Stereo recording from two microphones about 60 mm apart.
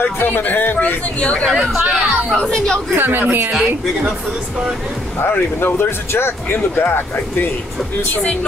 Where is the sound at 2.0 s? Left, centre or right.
Right.